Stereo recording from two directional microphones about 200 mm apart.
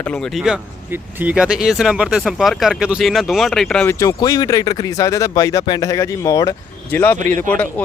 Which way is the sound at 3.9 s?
15° left (ahead or behind).